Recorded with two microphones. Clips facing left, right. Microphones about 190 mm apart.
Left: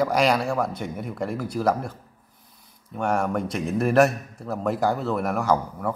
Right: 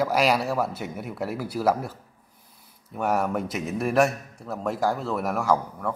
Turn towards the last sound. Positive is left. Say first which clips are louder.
# left 1 dB
turn(degrees=0)  # may be behind; listen again after turning